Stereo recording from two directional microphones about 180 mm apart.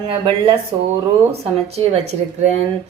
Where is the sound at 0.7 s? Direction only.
30° right (ahead or behind).